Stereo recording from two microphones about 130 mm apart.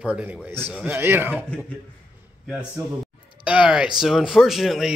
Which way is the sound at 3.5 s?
10° right (ahead or behind).